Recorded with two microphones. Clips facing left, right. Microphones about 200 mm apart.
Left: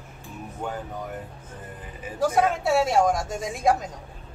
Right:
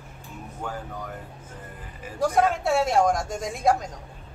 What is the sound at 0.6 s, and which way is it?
Speech, 20° left (ahead or behind).